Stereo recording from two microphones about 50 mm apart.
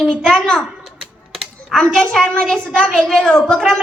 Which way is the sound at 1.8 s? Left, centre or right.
Centre.